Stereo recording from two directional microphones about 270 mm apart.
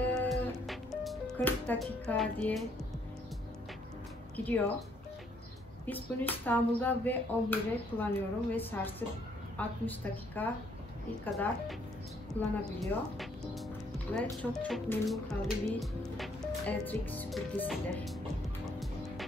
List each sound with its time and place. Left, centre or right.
0.0 s music: centre
4.4 s speech: centre
5.9 s speech: centre
12.4 s speech: centre
13.2 s music: centre
14.1 s speech: centre
18.7 s music: centre